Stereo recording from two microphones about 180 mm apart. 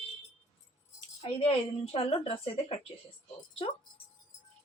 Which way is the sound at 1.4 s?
35° left (ahead or behind).